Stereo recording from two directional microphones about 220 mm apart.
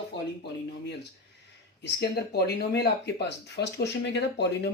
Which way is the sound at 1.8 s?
50° left (ahead or behind).